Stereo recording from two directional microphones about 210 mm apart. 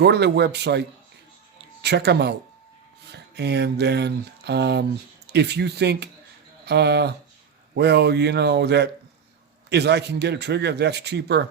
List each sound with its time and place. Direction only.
0.0 s speech: 50° right (ahead or behind)